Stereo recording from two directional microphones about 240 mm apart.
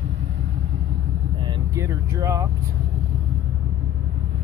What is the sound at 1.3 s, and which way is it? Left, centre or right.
Speech, centre.